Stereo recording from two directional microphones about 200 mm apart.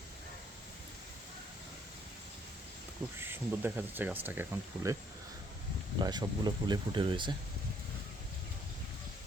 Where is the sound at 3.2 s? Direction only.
10° right (ahead or behind).